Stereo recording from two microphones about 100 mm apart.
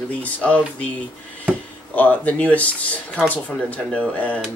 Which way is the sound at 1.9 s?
15° left (ahead or behind).